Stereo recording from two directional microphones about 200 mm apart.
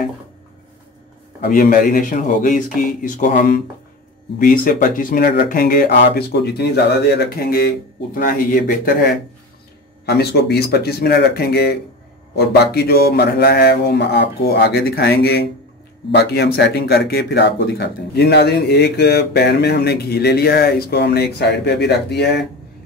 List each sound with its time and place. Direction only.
1.4 s speech: 45° left (ahead or behind)
10.0 s speech: 55° left (ahead or behind)